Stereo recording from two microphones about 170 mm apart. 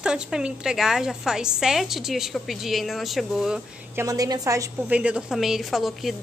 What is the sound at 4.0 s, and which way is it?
Speech, 20° right (ahead or behind).